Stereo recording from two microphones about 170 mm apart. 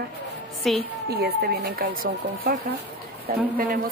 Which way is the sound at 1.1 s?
70° right (ahead or behind).